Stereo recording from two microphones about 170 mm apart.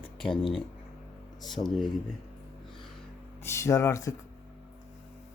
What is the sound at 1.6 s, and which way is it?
Speech, 40° left (ahead or behind).